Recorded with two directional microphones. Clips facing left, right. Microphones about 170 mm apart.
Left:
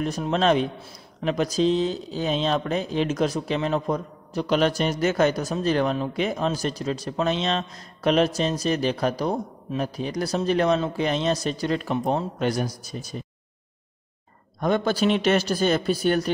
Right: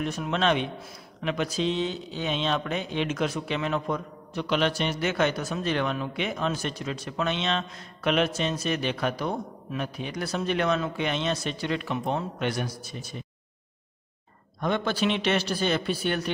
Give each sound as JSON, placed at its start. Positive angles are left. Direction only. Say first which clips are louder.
{"t": 0.0, "sound": "speech", "louder": "left 4 dB", "side_deg": 35}
{"t": 14.6, "sound": "speech", "louder": "left 4 dB", "side_deg": 40}